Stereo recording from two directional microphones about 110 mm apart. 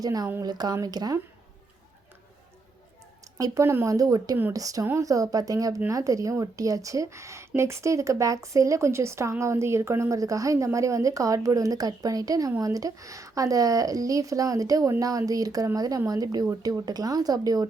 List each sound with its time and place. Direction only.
0.0 s a woman's voice: 35° right (ahead or behind)
3.3 s a woman's voice: 35° right (ahead or behind)